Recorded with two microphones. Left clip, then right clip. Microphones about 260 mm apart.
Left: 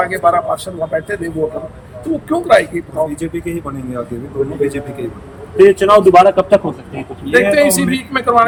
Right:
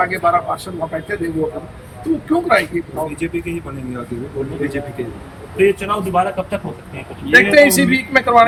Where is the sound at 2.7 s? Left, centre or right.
Centre.